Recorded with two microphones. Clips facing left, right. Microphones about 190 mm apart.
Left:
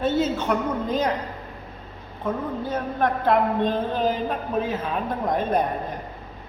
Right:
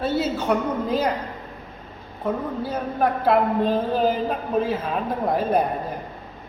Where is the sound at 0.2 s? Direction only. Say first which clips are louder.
Even; 5° right (ahead or behind).